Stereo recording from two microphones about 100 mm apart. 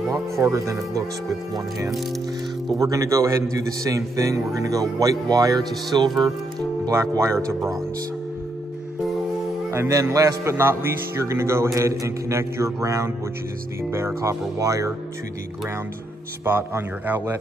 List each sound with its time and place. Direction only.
0.4 s speech: 30° right (ahead or behind)
2.8 s speech: 30° right (ahead or behind)
6.9 s a man's voice: 30° right (ahead or behind)
9.7 s a man's voice: 30° right (ahead or behind)
16.4 s a man's voice: 20° right (ahead or behind)